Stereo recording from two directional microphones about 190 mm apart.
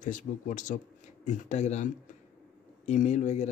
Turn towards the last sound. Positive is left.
turn(degrees=35)  # may be behind; listen again after turning